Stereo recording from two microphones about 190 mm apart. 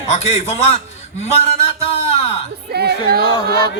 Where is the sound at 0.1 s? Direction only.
35° left (ahead or behind).